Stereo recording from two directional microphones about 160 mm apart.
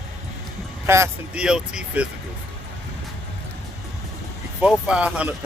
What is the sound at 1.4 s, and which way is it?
Speech, 5° right (ahead or behind).